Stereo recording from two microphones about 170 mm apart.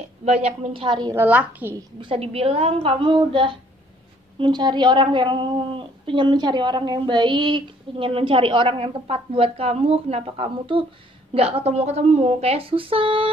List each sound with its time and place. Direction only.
0.2 s speech: 40° right (ahead or behind)
1.1 s a woman's voice: 10° right (ahead or behind)
2.0 s a woman's voice: 35° right (ahead or behind)